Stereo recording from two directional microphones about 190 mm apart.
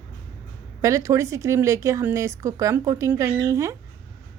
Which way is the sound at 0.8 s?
15° right (ahead or behind).